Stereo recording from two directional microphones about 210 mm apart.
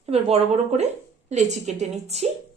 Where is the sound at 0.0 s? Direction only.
30° right (ahead or behind).